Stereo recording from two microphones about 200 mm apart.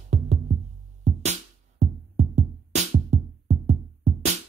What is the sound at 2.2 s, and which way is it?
Music, 35° right (ahead or behind).